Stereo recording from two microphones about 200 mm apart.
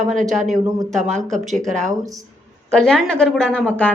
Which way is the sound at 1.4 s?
Centre (ahead or behind).